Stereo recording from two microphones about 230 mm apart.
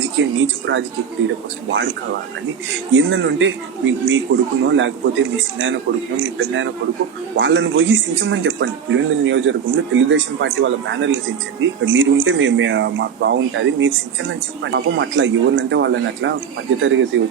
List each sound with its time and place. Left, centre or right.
0.0 s speech: right
2.6 s speech: right